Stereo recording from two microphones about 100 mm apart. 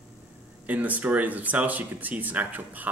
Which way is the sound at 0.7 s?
15° right (ahead or behind).